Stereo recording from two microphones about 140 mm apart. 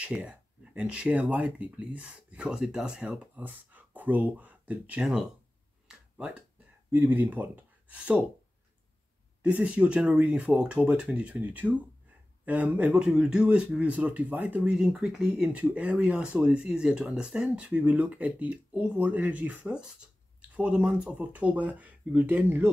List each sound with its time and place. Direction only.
0.0 s speech: 10° right (ahead or behind)
5.9 s a sound: 5° right (ahead or behind)
6.9 s speech: 10° right (ahead or behind)
9.4 s speech: 10° right (ahead or behind)